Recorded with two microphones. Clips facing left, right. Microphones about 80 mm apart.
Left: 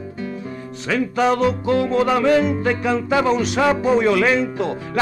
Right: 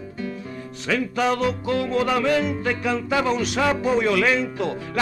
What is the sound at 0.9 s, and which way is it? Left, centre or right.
Music, left.